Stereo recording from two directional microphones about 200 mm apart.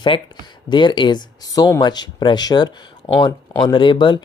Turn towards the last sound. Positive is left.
turn(degrees=25)  # may be behind; listen again after turning